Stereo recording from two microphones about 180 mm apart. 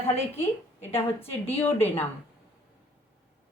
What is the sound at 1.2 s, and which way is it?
Speech, 35° left (ahead or behind).